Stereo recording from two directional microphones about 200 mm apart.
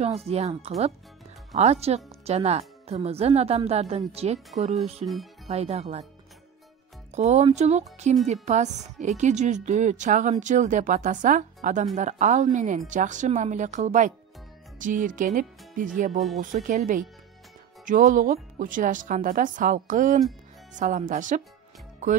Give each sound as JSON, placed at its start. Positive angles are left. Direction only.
{"t": 0.0, "sound": "speech", "side_deg": -30}
{"t": 5.0, "sound": "speech", "side_deg": 0}
{"t": 5.5, "sound": "speech", "side_deg": -30}
{"t": 7.1, "sound": "speech", "side_deg": -35}